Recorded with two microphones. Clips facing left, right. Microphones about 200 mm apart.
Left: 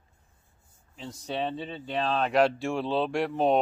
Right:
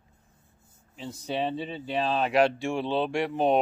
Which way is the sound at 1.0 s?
5° right (ahead or behind).